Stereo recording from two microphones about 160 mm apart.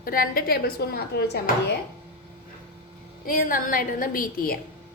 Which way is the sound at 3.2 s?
60° left (ahead or behind).